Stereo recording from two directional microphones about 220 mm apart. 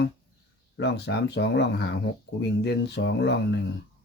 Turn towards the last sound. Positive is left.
turn(degrees=50)  # may be behind; listen again after turning